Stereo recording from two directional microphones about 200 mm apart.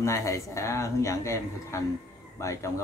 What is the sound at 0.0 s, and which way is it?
A man's voice, 15° left (ahead or behind).